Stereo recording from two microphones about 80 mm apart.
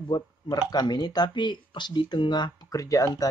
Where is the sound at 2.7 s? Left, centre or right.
Left.